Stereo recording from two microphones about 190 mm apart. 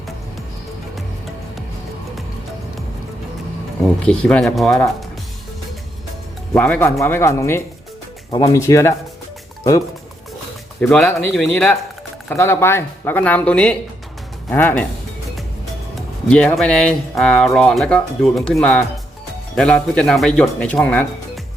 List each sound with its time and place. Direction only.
4.0 s speech: 5° left (ahead or behind)
6.5 s speech: 5° left (ahead or behind)
10.8 s speech: 5° left (ahead or behind)
12.3 s speech: 10° left (ahead or behind)
16.0 s speech: 5° left (ahead or behind)